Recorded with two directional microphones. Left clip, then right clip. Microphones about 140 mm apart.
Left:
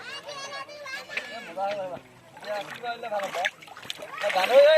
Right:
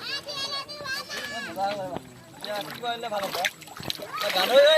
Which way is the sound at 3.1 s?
40° right (ahead or behind).